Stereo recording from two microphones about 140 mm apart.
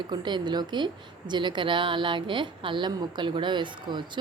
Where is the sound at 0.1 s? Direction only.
35° right (ahead or behind).